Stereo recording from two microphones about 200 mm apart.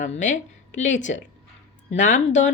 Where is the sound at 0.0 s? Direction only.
35° left (ahead or behind).